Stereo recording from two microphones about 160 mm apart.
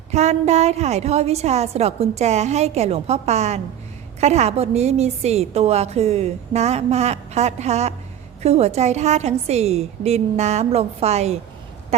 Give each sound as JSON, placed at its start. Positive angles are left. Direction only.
{"t": 0.1, "sound": "a woman's voice", "side_deg": -45}